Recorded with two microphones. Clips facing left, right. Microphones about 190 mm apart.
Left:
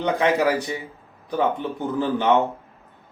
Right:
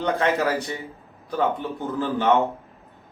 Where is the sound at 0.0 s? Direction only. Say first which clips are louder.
Left 2 dB; 15° left (ahead or behind).